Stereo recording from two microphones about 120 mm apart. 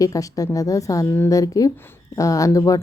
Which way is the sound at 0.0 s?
30° left (ahead or behind).